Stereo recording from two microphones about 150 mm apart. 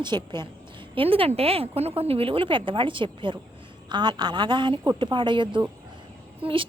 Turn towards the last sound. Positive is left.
turn(degrees=-35)  # may be behind; listen again after turning